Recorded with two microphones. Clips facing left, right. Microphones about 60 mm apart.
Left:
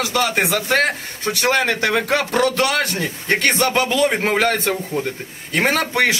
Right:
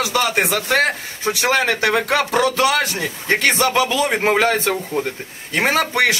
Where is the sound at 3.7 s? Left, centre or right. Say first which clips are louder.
Even; right.